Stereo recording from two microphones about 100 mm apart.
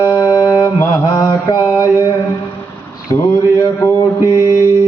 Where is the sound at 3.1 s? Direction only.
30° left (ahead or behind).